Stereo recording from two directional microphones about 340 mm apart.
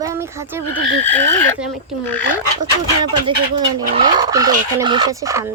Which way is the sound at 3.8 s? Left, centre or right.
Centre.